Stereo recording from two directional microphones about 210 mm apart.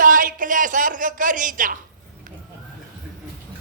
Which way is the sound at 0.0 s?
40° right (ahead or behind).